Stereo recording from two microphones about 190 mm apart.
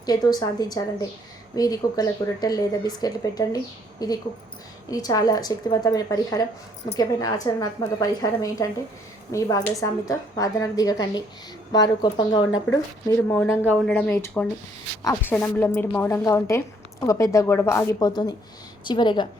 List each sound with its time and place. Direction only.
0.0 s a woman's voice: 20° left (ahead or behind)